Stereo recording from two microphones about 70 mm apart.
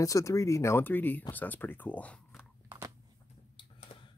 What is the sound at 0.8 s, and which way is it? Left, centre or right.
Speech, left.